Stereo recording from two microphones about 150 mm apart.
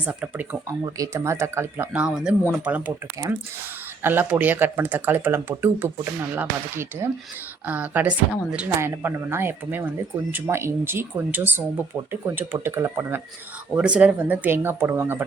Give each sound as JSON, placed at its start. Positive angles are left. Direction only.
{"t": 0.0, "sound": "speech", "side_deg": -10}
{"t": 4.0, "sound": "speech", "side_deg": -15}